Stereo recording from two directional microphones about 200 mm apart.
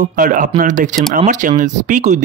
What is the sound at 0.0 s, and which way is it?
Speech, 45° right (ahead or behind).